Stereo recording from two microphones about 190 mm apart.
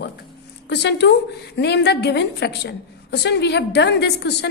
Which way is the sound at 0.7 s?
60° left (ahead or behind).